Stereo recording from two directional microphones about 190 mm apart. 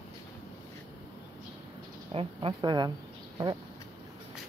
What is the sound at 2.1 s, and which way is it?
Speech, 30° right (ahead or behind).